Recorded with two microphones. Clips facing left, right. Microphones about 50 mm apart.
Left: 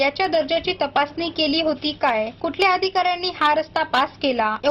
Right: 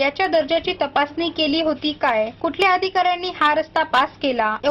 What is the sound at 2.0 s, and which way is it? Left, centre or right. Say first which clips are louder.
Speech: right 1 dB; centre.